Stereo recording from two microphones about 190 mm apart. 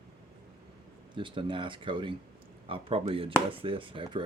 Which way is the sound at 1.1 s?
25° right (ahead or behind).